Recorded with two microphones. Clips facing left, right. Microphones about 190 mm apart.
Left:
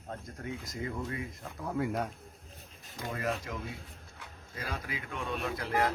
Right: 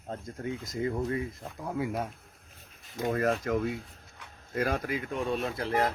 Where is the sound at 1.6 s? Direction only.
5° right (ahead or behind).